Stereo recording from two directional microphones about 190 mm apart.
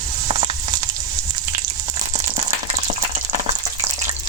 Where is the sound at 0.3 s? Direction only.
35° right (ahead or behind).